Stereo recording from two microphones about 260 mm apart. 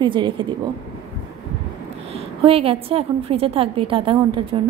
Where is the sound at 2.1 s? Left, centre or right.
Right.